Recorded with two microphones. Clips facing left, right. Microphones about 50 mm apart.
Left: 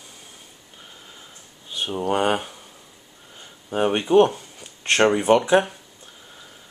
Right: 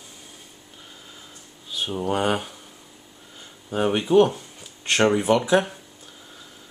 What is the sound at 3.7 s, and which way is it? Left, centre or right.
Speech, centre.